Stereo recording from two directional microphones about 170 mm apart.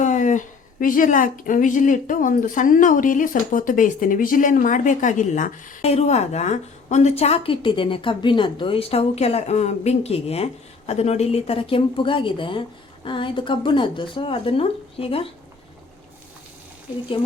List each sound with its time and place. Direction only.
0.0 s speech: 50° left (ahead or behind)